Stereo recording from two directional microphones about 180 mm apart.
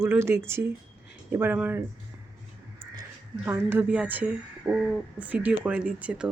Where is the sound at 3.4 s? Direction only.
10° right (ahead or behind).